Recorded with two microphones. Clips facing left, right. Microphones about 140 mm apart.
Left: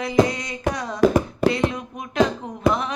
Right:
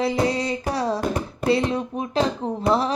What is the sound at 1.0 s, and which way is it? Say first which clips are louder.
Hands: left 8 dB; 90° left.